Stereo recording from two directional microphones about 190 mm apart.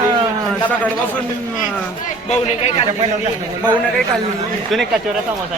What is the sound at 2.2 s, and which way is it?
Speech, 35° left (ahead or behind).